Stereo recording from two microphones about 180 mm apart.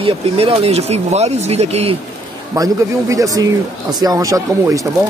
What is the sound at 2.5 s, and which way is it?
A man's voice, 20° right (ahead or behind).